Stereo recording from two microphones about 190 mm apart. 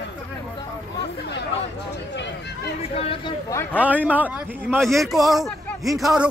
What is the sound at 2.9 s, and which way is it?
Speech, 30° left (ahead or behind).